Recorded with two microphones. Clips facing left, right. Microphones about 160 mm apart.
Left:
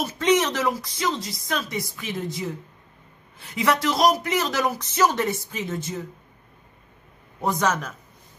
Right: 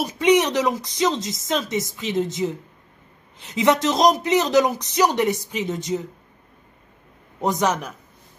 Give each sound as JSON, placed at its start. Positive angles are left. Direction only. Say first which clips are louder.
{"t": 0.0, "sound": "a man's voice", "louder": "right 3 dB", "side_deg": -15}
{"t": 7.3, "sound": "a man's voice", "louder": "right 2 dB", "side_deg": -20}